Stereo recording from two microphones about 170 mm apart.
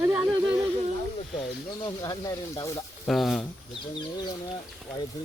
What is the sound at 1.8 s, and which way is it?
Speech, 20° left (ahead or behind).